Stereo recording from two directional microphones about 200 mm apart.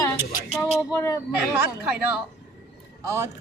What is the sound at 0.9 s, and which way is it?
Speech, 15° left (ahead or behind).